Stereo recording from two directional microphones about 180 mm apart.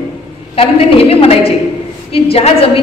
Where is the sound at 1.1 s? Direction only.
30° left (ahead or behind).